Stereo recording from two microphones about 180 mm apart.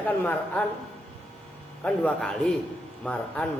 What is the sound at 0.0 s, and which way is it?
Speech, 10° left (ahead or behind).